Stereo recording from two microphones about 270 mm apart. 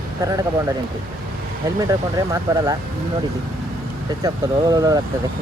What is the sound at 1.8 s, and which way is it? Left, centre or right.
Speech, centre.